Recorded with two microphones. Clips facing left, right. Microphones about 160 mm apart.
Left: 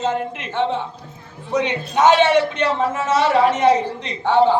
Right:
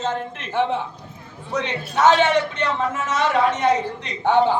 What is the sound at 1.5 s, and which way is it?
Speech, 15° left (ahead or behind).